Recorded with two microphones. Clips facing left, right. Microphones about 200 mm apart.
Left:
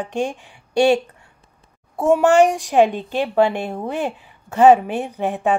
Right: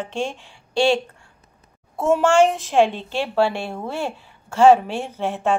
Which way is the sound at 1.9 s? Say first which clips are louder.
Left 2 dB; 15° left (ahead or behind).